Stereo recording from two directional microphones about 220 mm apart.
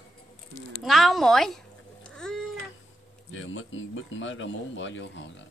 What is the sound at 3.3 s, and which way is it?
Speech, 60° left (ahead or behind).